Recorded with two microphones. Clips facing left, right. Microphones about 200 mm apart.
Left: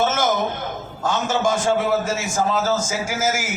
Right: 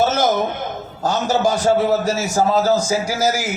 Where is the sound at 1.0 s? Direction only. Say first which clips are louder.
Right 3 dB; 35° right (ahead or behind).